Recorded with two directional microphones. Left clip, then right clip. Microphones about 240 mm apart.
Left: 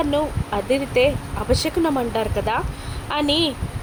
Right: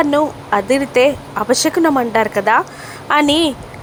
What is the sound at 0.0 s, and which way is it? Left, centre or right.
Speech, centre.